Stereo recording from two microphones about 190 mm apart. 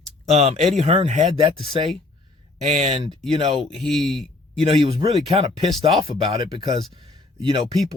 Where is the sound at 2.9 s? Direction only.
25° right (ahead or behind).